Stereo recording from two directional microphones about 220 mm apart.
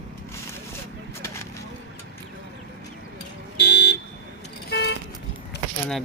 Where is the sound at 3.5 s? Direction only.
50° left (ahead or behind).